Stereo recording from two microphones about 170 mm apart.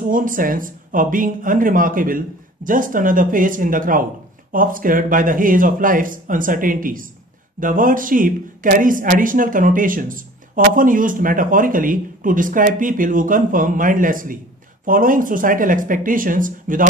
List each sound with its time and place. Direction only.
0.0 s speech: 50° right (ahead or behind)